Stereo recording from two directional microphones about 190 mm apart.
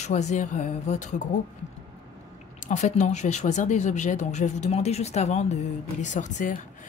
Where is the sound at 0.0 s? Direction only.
40° left (ahead or behind).